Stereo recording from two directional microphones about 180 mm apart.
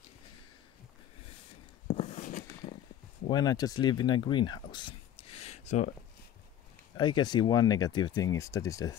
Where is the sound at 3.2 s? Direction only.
20° left (ahead or behind).